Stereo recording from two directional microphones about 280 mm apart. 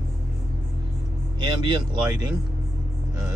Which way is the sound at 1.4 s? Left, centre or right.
Centre.